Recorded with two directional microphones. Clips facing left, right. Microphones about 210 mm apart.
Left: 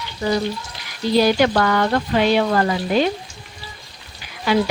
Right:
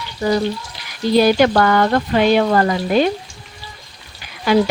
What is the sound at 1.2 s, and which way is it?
Speech, 50° right (ahead or behind).